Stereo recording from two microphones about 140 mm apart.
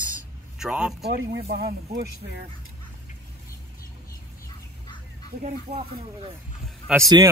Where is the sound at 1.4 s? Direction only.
90° right.